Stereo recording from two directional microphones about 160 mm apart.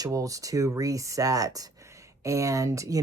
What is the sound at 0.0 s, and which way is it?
Speech, 20° right (ahead or behind).